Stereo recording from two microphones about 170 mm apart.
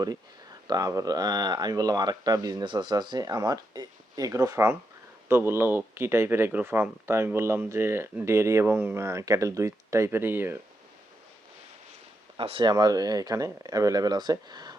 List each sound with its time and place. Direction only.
0.7 s speech: 20° right (ahead or behind)
12.4 s speech: 30° right (ahead or behind)